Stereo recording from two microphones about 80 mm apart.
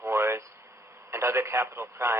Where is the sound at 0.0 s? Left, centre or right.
Right.